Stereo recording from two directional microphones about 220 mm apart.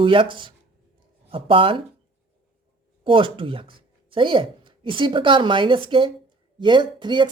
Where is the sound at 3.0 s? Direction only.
25° right (ahead or behind).